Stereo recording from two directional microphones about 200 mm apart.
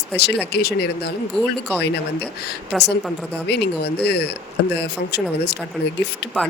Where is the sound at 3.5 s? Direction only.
55° left (ahead or behind).